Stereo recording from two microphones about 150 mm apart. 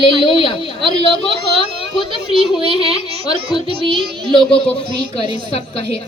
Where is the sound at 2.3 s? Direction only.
40° right (ahead or behind).